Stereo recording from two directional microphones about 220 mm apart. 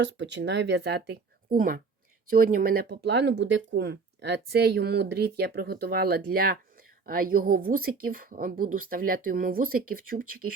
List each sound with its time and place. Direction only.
0.0 s speech: 55° right (ahead or behind)